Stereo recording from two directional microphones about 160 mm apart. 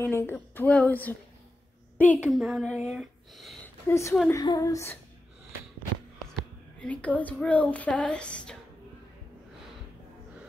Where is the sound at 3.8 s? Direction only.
20° left (ahead or behind).